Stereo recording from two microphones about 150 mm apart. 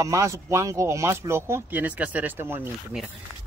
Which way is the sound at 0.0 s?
20° right (ahead or behind).